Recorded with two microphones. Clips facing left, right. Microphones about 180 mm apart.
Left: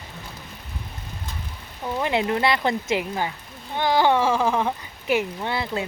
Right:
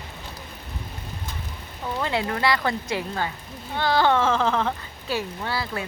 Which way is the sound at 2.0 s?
20° left (ahead or behind).